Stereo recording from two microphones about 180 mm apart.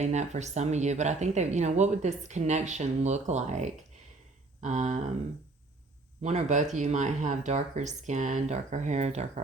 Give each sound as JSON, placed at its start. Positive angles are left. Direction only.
{"t": 0.0, "sound": "speech", "side_deg": -40}
{"t": 6.2, "sound": "speech", "side_deg": -40}